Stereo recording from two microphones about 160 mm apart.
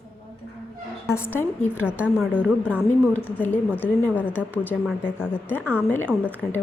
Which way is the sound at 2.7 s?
10° right (ahead or behind).